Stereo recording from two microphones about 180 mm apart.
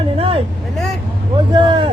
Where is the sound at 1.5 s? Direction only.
25° right (ahead or behind).